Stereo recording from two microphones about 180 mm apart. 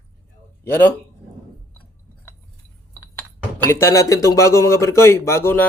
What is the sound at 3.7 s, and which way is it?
Speech, 15° left (ahead or behind).